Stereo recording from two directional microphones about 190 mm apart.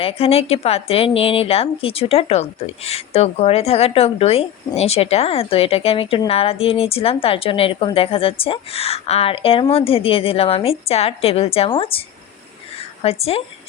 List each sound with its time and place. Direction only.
0.0 s a woman's voice: 30° left (ahead or behind)